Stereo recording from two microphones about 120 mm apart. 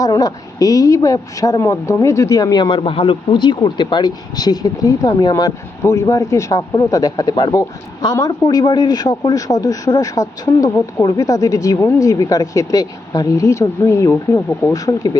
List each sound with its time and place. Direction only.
0.0 s speech: 30° left (ahead or behind)